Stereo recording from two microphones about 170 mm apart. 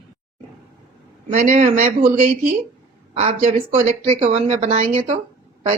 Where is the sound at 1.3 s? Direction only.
45° right (ahead or behind).